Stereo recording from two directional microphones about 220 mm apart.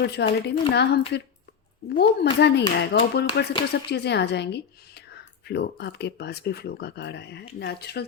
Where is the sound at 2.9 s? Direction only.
50° left (ahead or behind).